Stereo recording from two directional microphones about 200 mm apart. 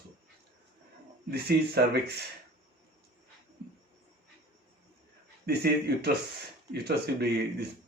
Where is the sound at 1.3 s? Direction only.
55° right (ahead or behind).